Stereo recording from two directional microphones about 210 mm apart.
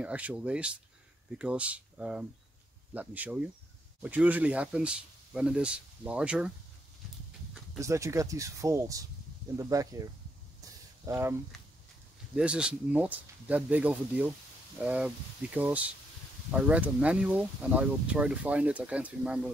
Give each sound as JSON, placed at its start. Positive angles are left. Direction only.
{"t": 0.0, "sound": "speech", "side_deg": -5}
{"t": 7.8, "sound": "speech", "side_deg": -15}
{"t": 10.6, "sound": "a sound", "side_deg": -15}
{"t": 12.4, "sound": "speech", "side_deg": -5}